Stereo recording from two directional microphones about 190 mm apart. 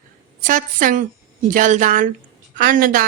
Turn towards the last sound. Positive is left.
turn(degrees=-45)  # may be behind; listen again after turning